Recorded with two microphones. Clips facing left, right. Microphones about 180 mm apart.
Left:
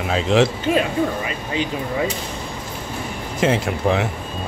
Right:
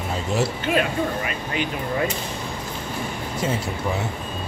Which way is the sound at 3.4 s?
90° left.